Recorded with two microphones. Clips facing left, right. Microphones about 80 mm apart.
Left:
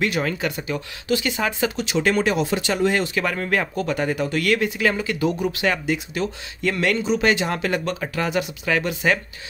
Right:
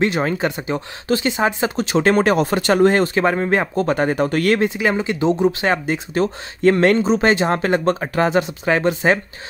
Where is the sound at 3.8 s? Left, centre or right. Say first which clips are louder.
Right 5 dB; right.